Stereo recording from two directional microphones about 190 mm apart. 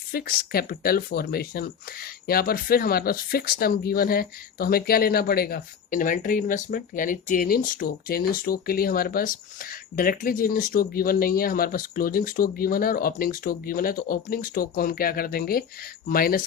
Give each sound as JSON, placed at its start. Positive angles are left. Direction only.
{"t": 0.1, "sound": "speech", "side_deg": 50}